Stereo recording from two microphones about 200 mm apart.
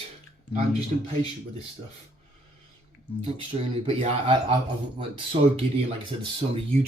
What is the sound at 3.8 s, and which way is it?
A man's voice, 30° right (ahead or behind).